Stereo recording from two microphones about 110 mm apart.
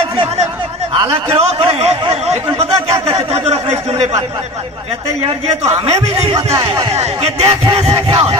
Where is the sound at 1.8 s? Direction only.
80° right.